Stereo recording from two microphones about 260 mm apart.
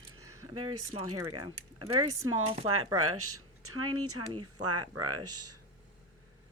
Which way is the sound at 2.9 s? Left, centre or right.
Right.